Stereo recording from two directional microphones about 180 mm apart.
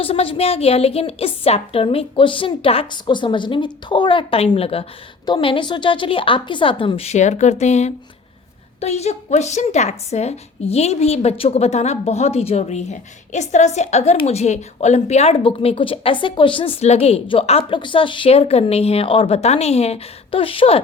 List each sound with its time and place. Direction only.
0.0 s a woman's voice: 30° left (ahead or behind)